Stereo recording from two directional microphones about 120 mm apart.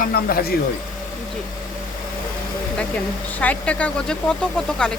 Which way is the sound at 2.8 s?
10° left (ahead or behind).